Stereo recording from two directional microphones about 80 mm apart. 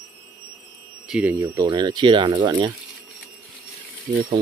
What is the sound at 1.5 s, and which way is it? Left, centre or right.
Speech, right.